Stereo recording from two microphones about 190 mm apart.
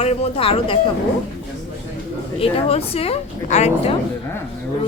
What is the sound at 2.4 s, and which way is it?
Speech, 30° left (ahead or behind).